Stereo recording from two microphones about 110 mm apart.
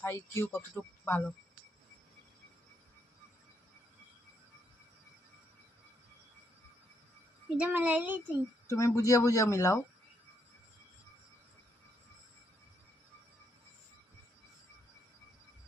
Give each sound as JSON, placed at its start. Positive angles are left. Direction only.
{"t": 0.0, "sound": "speech", "side_deg": 25}
{"t": 7.5, "sound": "speech", "side_deg": -15}
{"t": 8.6, "sound": "speech", "side_deg": 30}